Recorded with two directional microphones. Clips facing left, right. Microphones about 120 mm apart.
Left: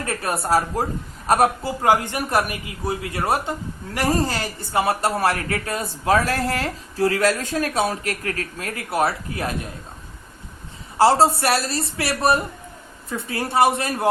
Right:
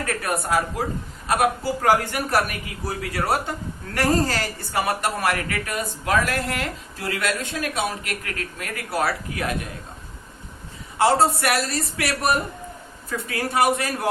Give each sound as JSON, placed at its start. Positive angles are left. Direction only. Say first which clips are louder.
{"t": 0.0, "sound": "a man's voice", "louder": "left 1 dB", "side_deg": 25}
{"t": 1.6, "sound": "a man's voice", "louder": "left 1 dB", "side_deg": 20}
{"t": 10.9, "sound": "a man's voice", "louder": "left 3 dB", "side_deg": 30}